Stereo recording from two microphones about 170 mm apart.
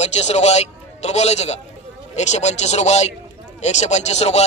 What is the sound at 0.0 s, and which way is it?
A man's voice, 40° left (ahead or behind).